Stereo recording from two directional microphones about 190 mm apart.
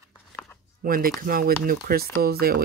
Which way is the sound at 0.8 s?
50° right (ahead or behind).